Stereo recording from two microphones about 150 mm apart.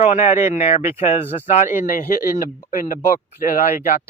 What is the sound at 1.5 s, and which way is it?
Speech, 55° left (ahead or behind).